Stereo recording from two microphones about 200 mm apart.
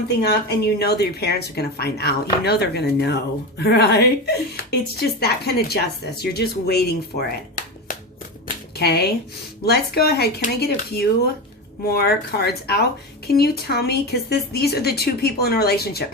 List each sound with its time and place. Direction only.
0.2 s speech: 55° left (ahead or behind)